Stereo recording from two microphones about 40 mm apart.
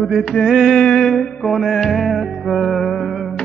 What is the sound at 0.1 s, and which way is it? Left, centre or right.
Music, centre.